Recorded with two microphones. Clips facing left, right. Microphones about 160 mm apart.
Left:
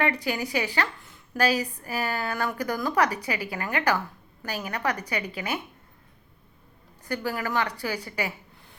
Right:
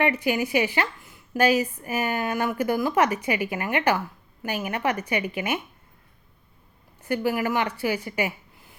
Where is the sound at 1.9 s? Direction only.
20° right (ahead or behind).